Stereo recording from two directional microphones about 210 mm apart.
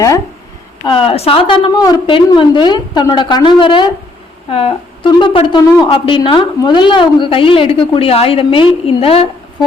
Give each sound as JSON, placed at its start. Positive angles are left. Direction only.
{"t": 0.9, "sound": "a woman's voice", "side_deg": 25}